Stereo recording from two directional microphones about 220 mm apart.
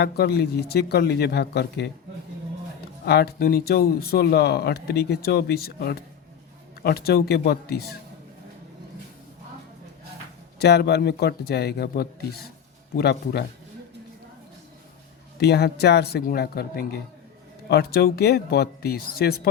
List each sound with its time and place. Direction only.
0.0 s speech: 45° left (ahead or behind)
3.1 s speech: 45° left (ahead or behind)
10.6 s speech: 50° left (ahead or behind)
15.4 s speech: 50° left (ahead or behind)